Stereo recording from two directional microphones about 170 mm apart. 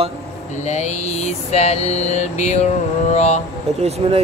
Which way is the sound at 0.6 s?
40° left (ahead or behind).